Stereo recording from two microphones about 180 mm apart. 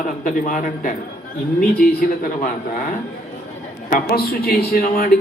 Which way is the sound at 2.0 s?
50° left (ahead or behind).